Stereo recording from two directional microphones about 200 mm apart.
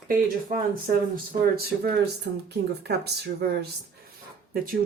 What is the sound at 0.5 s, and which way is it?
Speech, 50° right (ahead or behind).